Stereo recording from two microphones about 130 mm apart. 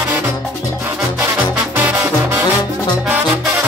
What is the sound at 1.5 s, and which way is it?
Music, 15° right (ahead or behind).